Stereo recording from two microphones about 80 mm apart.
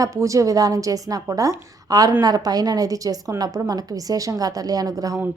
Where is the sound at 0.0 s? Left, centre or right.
Right.